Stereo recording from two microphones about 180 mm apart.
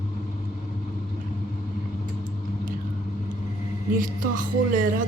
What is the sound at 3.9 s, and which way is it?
A woman's voice, 50° right (ahead or behind).